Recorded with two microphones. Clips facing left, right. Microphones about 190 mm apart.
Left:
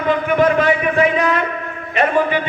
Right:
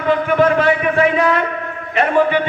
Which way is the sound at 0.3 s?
15° left (ahead or behind).